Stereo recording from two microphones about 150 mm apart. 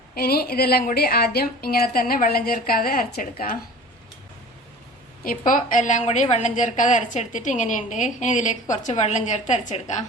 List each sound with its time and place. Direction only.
0.1 s a woman's voice: 90° left; by 3.6 s 70° left (ahead or behind)
5.5 s a woman's voice: 60° left (ahead or behind)